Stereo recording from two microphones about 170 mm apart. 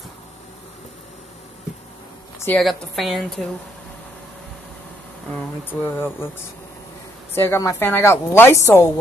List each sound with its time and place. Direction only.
2.4 s a woman's voice: 5° left (ahead or behind)
5.7 s a woman's voice: 10° left (ahead or behind)
7.3 s a woman's voice: 15° left (ahead or behind)